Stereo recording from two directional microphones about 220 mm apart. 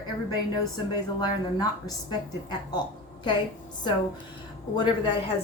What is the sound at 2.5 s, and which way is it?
Speech, 20° left (ahead or behind).